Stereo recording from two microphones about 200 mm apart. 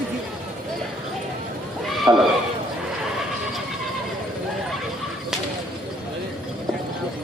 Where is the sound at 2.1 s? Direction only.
20° right (ahead or behind).